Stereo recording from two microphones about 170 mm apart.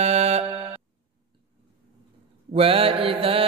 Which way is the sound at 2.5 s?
35° right (ahead or behind).